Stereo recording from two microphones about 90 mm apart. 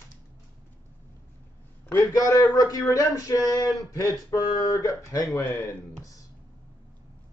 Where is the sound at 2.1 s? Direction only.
40° left (ahead or behind).